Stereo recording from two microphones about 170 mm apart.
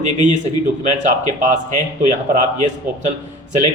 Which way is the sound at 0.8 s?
45° right (ahead or behind).